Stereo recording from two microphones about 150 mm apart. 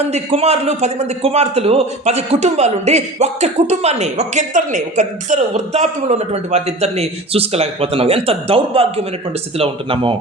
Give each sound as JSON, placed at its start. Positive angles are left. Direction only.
{"t": 0.1, "sound": "a man's voice", "side_deg": -40}